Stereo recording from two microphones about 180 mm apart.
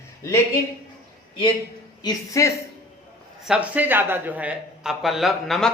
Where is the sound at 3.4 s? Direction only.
5° right (ahead or behind).